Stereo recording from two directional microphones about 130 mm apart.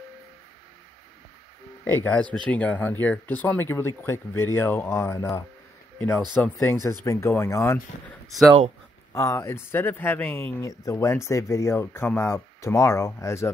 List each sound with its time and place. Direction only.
1.9 s speech: 15° left (ahead or behind)
9.1 s speech: 25° left (ahead or behind)